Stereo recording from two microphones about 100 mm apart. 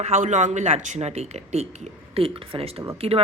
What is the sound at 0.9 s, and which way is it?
Speech, 90° right.